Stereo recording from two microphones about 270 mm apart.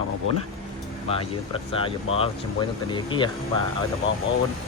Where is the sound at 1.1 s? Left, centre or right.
Centre.